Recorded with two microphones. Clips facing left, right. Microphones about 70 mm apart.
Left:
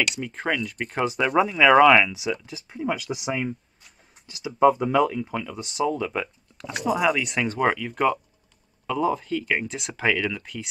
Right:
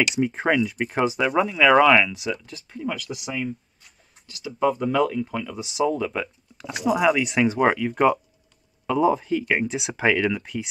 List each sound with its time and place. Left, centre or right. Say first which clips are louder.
0.0 s speech: right 5 dB; centre
0.3 s speech: right 4 dB; centre
0.6 s speech: right 4 dB; centre
2.7 s speech: left 2 dB; centre
3.3 s speech: left 1 dB; left
4.4 s speech: left 4 dB; centre